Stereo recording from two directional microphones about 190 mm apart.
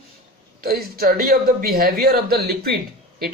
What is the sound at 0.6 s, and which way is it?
Speech, 50° right (ahead or behind).